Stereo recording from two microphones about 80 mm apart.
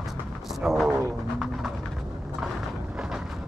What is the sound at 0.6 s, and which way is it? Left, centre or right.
Speech, centre.